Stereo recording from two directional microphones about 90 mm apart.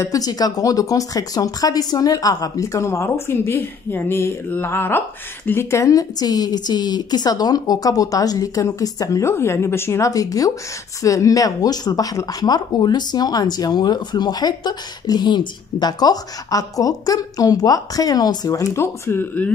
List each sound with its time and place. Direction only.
0.0 s speech: 40° left (ahead or behind); by 19.5 s 20° left (ahead or behind)